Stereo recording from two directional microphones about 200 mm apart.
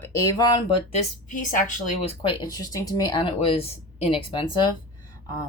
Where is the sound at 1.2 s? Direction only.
40° left (ahead or behind).